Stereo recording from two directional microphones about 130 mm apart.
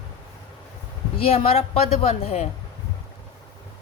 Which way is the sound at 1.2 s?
50° left (ahead or behind).